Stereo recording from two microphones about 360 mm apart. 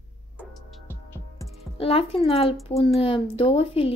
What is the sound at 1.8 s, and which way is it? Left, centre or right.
A woman's voice, centre.